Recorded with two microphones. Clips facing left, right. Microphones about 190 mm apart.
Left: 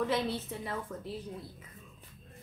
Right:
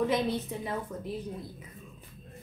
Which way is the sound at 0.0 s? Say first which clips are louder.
Right 3 dB; 15° right (ahead or behind).